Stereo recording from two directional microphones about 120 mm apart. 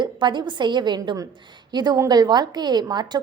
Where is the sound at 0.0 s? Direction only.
40° right (ahead or behind).